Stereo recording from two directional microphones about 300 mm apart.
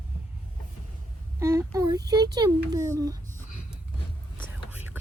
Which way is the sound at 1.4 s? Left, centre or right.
Centre.